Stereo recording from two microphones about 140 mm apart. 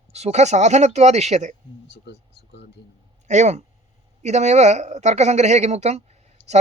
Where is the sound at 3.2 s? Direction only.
55° right (ahead or behind).